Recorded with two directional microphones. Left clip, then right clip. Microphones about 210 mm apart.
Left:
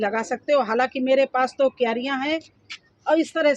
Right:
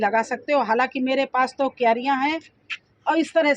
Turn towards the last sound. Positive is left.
turn(degrees=-50)  # may be behind; listen again after turning